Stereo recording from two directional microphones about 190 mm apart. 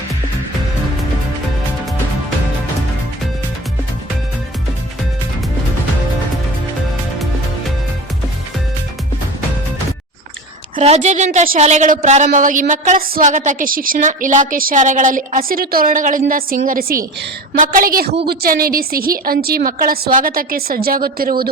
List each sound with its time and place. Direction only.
10.8 s a woman's voice: 35° right (ahead or behind); by 21.5 s 50° right (ahead or behind)